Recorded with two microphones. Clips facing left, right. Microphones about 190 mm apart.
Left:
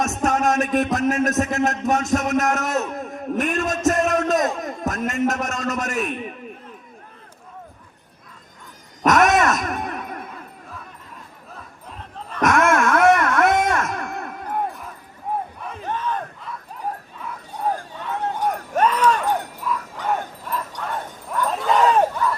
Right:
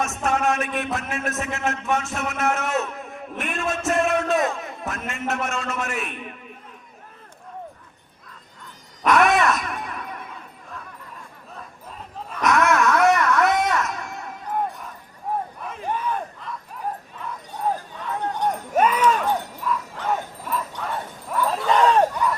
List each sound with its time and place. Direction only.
0.0 s music: 40° left (ahead or behind)
9.0 s wail: 45° left (ahead or behind)
12.4 s a sound: 50° left (ahead or behind)
15.9 s battle cry: 10° right (ahead or behind)
18.7 s a sound: 10° right (ahead or behind)
19.2 s bow-wow: 10° left (ahead or behind)
20.5 s bow-wow: centre (ahead or behind)